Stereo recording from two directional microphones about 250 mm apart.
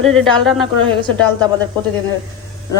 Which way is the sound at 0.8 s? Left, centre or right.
Centre.